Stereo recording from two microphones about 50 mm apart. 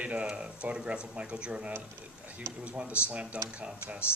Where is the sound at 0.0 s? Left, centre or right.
Right.